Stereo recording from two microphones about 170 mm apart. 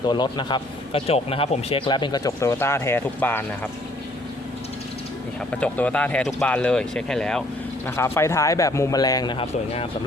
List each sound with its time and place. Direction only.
0.1 s a man's voice: 25° left (ahead or behind)
5.5 s speech: 10° left (ahead or behind)
7.9 s a man's voice: 15° left (ahead or behind); by 9.9 s 35° left (ahead or behind)